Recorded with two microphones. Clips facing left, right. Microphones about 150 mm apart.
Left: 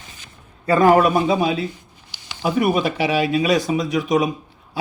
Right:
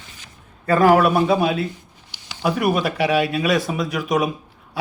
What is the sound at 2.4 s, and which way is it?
Speech, centre (ahead or behind).